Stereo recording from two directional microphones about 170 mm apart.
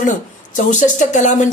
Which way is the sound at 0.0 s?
50° left (ahead or behind).